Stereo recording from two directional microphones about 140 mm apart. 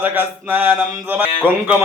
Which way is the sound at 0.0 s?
15° right (ahead or behind).